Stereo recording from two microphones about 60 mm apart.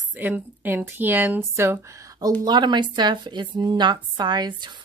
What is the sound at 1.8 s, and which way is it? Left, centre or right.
Speech, right.